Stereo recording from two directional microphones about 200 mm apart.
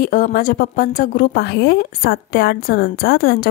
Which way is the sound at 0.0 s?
45° left (ahead or behind).